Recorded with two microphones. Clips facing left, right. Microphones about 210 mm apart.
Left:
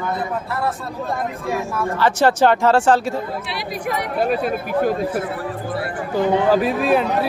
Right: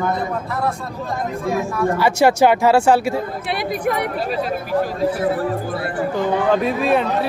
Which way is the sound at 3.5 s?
55° right (ahead or behind).